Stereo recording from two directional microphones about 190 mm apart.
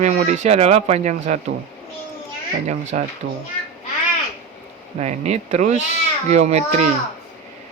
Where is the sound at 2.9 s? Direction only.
40° right (ahead or behind).